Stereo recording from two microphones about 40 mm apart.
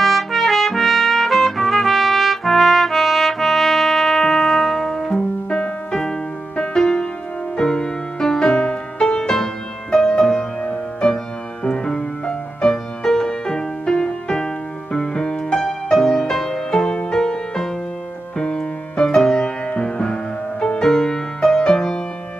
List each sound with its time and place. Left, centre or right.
0.0 s trumpet: centre
5.9 s music: centre